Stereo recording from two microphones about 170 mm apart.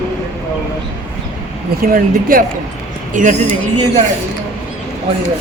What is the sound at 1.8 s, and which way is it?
Speech, 55° right (ahead or behind).